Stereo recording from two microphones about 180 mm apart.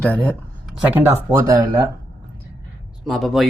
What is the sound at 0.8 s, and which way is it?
Speech, 10° right (ahead or behind).